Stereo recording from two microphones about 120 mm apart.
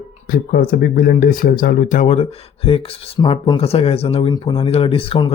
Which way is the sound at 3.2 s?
40° left (ahead or behind).